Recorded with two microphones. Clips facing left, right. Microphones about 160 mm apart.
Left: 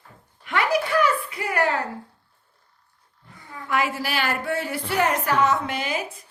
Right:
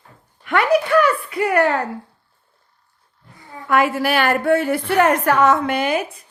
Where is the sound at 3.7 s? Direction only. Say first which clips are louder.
Right 8 dB; 55° right (ahead or behind).